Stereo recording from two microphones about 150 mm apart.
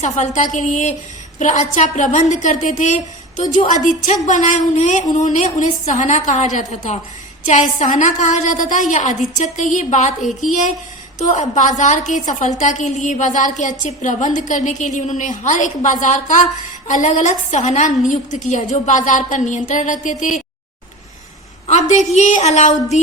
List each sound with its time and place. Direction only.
0.0 s a woman's voice: 55° left (ahead or behind)
10.2 s a woman's voice: centre (ahead or behind)
11.2 s a woman's voice: 55° left (ahead or behind)
21.7 s a woman's voice: 50° left (ahead or behind)